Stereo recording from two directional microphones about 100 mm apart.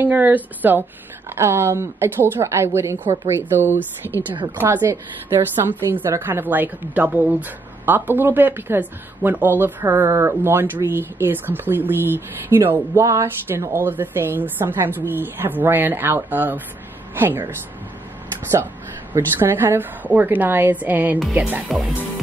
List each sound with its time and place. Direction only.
0.0 s a woman's voice: 20° right (ahead or behind)
19.1 s a woman's voice: 20° right (ahead or behind)
21.6 s speech: centre (ahead or behind)